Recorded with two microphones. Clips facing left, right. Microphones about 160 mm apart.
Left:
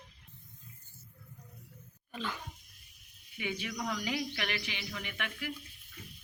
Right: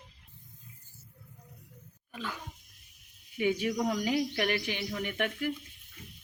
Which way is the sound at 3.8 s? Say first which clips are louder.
Right 3 dB; 40° right (ahead or behind).